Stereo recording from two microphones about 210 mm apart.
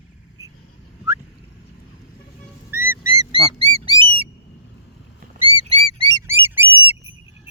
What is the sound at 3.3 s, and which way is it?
Duck, 25° right (ahead or behind).